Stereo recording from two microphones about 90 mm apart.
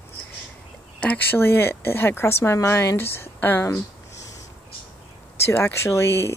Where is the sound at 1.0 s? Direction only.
20° left (ahead or behind).